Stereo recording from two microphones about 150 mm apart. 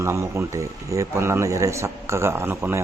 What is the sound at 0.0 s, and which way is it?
Speech, 20° right (ahead or behind).